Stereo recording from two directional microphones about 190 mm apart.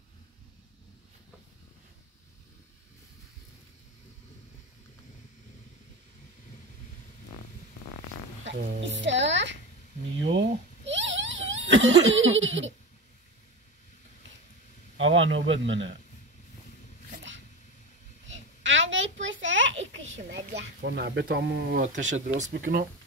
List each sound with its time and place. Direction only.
8.5 s speech: 45° right (ahead or behind)
8.8 s music: 70° right (ahead or behind)
10.2 s giggle: 65° right (ahead or behind); by 12.7 s 80° right
15.0 s a man's voice: 90° right
18.2 s a sound: 75° right (ahead or behind); by 21.9 s 50° right (ahead or behind)
22.5 s speech: 55° right (ahead or behind)